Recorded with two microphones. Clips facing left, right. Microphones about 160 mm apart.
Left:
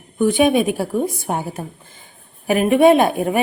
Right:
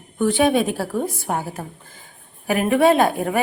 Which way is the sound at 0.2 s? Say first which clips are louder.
Left 2 dB; 15° left (ahead or behind).